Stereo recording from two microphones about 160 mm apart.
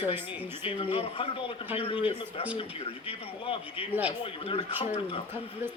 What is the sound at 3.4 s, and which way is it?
Speech, 35° left (ahead or behind).